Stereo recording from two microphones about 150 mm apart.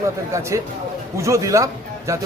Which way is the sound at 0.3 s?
20° right (ahead or behind).